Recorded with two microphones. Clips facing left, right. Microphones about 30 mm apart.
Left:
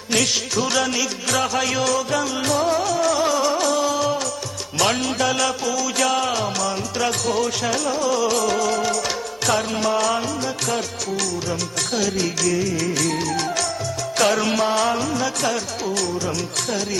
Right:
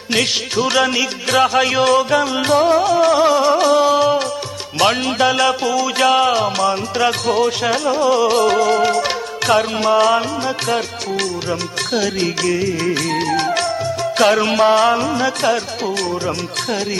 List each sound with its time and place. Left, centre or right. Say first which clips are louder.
0.1 s music: right 3 dB; right
11.9 s music: right 4 dB; right